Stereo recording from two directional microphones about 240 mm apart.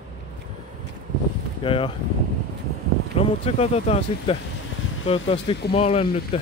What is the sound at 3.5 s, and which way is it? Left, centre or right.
Speech, left.